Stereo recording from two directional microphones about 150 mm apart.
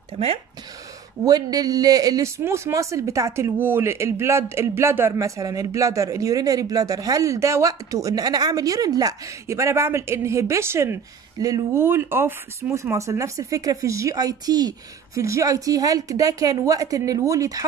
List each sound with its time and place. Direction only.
1.2 s a man's voice: 25° right (ahead or behind)